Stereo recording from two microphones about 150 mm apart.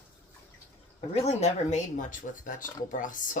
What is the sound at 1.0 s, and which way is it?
Speech, 50° left (ahead or behind).